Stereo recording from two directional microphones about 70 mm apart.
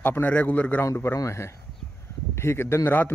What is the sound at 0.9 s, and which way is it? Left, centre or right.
A man's voice, left.